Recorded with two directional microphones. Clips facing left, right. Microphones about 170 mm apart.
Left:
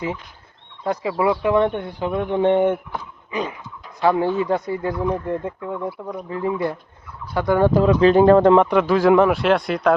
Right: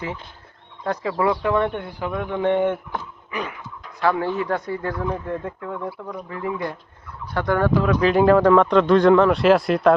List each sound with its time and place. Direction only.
1.2 s speech: 20° left (ahead or behind)
4.0 s speech: 20° left (ahead or behind)
7.7 s speech: 30° left (ahead or behind)
8.6 s speech: 5° left (ahead or behind)
9.4 s speech: centre (ahead or behind)